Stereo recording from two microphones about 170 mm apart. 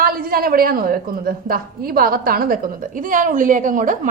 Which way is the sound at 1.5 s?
60° right (ahead or behind).